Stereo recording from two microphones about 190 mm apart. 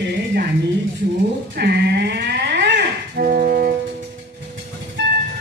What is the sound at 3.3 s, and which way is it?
Music, 45° right (ahead or behind).